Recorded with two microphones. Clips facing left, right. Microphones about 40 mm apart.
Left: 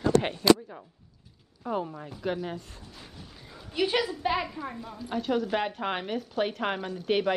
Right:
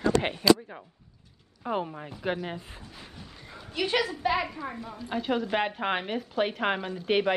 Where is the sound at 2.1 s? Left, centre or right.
Right.